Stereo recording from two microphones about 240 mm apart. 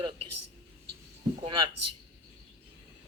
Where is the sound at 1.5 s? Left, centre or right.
Right.